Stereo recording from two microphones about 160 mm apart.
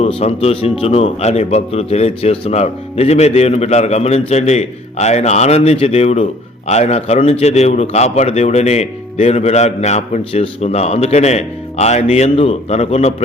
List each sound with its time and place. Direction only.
0.2 s a man's voice: 40° left (ahead or behind)